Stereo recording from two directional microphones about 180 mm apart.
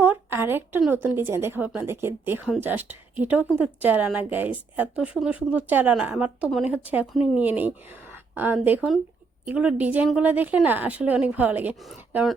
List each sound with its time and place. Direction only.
0.0 s a woman's voice: 10° right (ahead or behind)